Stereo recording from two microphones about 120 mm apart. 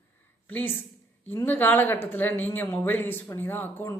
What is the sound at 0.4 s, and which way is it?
A woman's voice, 15° left (ahead or behind).